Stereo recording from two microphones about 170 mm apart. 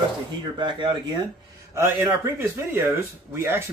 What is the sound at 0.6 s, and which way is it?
Speech, 25° right (ahead or behind).